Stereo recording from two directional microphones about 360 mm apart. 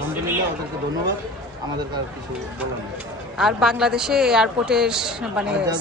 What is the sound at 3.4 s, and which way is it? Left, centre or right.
A woman's voice, centre.